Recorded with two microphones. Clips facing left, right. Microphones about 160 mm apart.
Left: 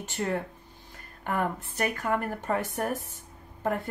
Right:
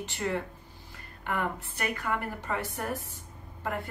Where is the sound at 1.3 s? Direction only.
45° left (ahead or behind).